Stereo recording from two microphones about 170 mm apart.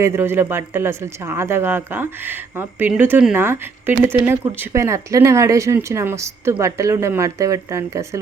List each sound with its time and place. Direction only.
0.0 s speech: 15° right (ahead or behind)